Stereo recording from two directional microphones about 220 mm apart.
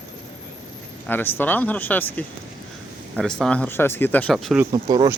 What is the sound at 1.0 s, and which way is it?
Speech, 10° left (ahead or behind).